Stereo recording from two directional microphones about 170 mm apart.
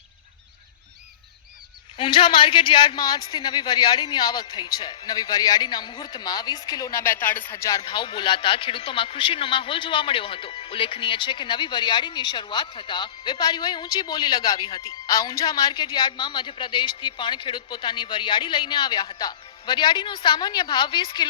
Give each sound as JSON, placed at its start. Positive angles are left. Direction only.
{"t": 2.0, "sound": "a man's voice", "side_deg": 30}
{"t": 7.8, "sound": "a man's voice", "side_deg": 30}